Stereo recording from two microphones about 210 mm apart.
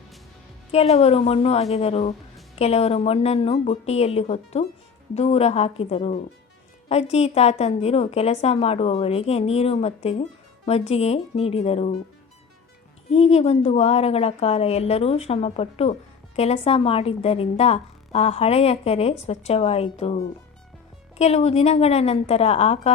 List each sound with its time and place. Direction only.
0.7 s a woman's voice: 30° left (ahead or behind)
13.1 s a woman's voice: 30° left (ahead or behind)
21.2 s a woman's voice: 30° left (ahead or behind)